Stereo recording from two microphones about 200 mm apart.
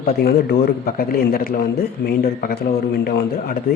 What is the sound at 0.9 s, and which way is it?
A man's voice, 45° left (ahead or behind).